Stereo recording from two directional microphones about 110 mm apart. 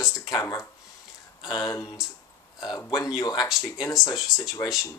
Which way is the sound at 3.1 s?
35° left (ahead or behind).